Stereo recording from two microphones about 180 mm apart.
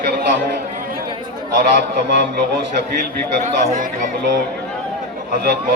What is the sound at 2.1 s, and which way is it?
Speech, 70° right (ahead or behind).